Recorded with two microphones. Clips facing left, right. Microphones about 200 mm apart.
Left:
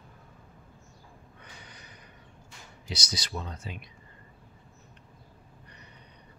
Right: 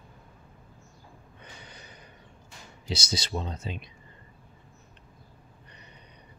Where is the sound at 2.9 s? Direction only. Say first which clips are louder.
Right 5 dB; 25° right (ahead or behind).